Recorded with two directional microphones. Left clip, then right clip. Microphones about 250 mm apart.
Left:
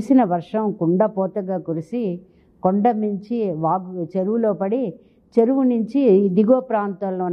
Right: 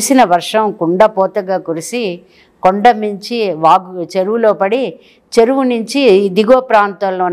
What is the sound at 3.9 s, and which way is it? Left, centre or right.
A man's voice, centre.